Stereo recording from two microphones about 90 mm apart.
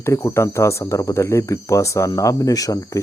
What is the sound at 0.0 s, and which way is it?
Speech, 30° left (ahead or behind).